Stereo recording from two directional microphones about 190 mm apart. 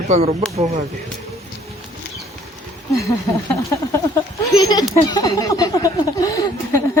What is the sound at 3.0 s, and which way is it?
Speech, 15° left (ahead or behind).